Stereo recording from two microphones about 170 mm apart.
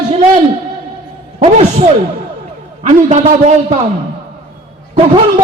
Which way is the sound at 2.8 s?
45° right (ahead or behind).